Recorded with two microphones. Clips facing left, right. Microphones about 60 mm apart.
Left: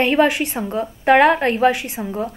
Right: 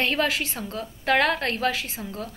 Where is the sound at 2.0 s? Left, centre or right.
Left.